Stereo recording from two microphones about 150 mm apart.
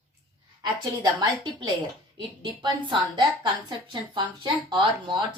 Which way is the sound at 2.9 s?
30° right (ahead or behind).